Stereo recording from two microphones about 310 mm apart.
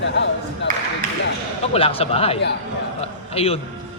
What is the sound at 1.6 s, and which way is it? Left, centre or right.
Speech, centre.